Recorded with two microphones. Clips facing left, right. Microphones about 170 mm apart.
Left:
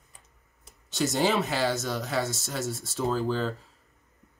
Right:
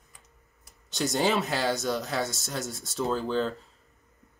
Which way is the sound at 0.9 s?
Centre (ahead or behind).